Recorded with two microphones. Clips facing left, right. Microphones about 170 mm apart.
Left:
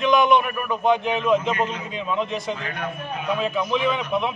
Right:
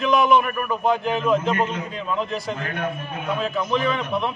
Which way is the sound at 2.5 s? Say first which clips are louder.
Right 3 dB; 50° right (ahead or behind).